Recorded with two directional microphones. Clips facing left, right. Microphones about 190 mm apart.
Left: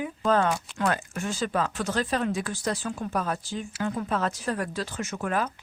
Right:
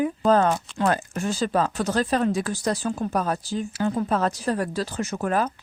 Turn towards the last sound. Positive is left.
turn(degrees=-35)  # may be behind; listen again after turning